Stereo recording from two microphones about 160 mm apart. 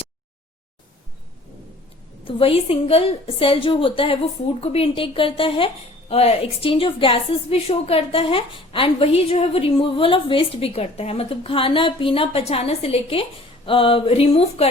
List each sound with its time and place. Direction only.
2.2 s a woman's voice: 35° left (ahead or behind)